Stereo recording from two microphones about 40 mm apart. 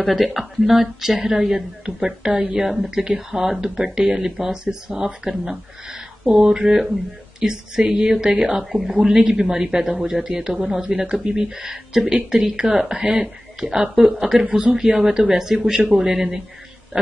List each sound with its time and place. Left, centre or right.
0.0 s a man's voice: centre
12.8 s a man's voice: right